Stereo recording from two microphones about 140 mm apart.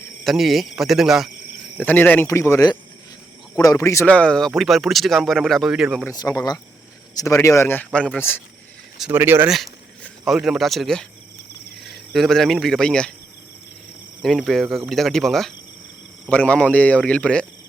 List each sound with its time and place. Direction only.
0.3 s speech: centre (ahead or behind)
1.8 s speech: 10° left (ahead or behind)
4.1 s speech: 5° left (ahead or behind)
6.1 s speech: 25° left (ahead or behind)
9.1 s speech: 15° right (ahead or behind)
10.0 s speech: centre (ahead or behind)
14.2 s speech: centre (ahead or behind)